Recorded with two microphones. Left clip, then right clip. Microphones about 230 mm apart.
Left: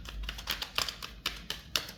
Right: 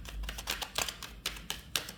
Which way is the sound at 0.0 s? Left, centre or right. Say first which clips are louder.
Left 1 dB; centre.